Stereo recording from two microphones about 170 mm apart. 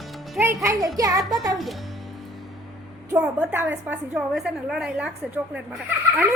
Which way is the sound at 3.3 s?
10° right (ahead or behind).